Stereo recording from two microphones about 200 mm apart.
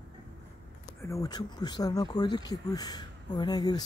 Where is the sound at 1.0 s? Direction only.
15° left (ahead or behind).